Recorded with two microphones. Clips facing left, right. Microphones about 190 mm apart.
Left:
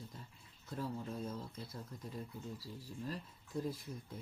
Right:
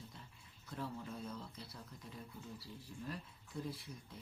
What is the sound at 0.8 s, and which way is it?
Speech, 40° left (ahead or behind).